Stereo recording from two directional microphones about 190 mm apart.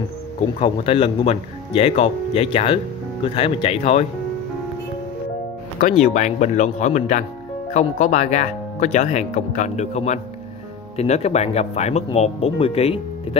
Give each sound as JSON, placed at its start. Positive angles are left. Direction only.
{"t": 0.6, "sound": "speech", "side_deg": 30}
{"t": 6.0, "sound": "speech", "side_deg": 40}